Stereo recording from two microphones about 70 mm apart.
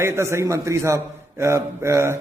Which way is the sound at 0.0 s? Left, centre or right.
Right.